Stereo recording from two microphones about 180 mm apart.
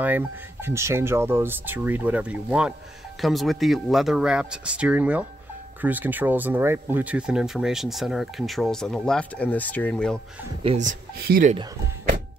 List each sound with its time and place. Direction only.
0.0 s speech: 10° right (ahead or behind); by 10.2 s 5° left (ahead or behind)
10.6 s speech: 40° right (ahead or behind)